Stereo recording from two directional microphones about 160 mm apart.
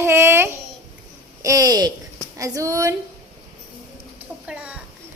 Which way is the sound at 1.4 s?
20° right (ahead or behind).